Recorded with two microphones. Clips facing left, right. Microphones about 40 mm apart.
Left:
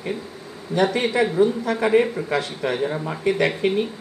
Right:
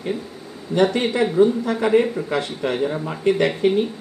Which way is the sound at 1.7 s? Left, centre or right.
Centre.